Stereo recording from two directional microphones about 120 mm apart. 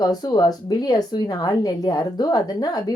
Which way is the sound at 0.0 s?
35° left (ahead or behind).